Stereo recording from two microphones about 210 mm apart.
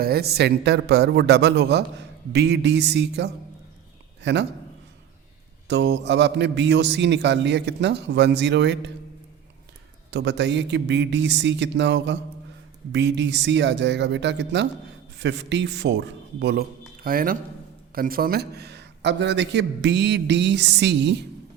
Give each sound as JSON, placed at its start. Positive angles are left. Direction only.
{"t": 0.0, "sound": "a man's voice", "side_deg": -50}
{"t": 5.6, "sound": "a man's voice", "side_deg": -55}
{"t": 10.1, "sound": "a man's voice", "side_deg": -55}